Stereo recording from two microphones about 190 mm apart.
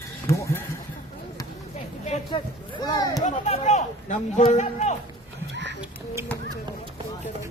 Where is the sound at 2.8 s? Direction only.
20° left (ahead or behind).